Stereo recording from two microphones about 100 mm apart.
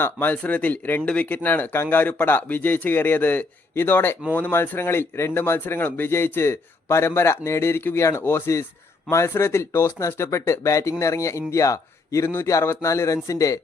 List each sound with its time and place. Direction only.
0.0 s a man's voice: 15° left (ahead or behind); by 13.6 s 35° left (ahead or behind)